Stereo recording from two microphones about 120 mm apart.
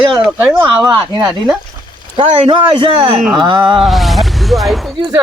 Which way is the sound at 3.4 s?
40° right (ahead or behind).